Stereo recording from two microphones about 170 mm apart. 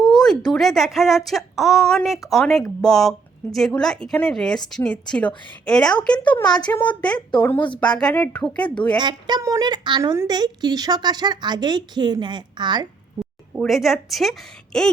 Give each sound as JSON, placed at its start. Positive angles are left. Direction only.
{"t": 0.0, "sound": "speech", "side_deg": 5}
{"t": 9.0, "sound": "a woman's voice", "side_deg": -25}
{"t": 13.6, "sound": "speech", "side_deg": 0}